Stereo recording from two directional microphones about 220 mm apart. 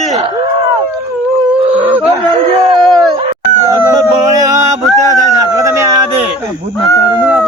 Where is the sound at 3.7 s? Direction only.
15° right (ahead or behind).